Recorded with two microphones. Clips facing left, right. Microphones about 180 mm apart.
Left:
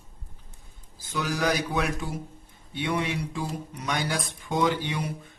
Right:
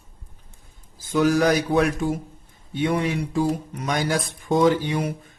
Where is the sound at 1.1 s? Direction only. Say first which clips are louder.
Right 8 dB; 50° right (ahead or behind).